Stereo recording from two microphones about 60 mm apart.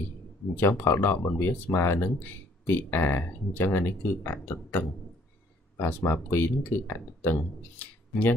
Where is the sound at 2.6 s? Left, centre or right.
Left.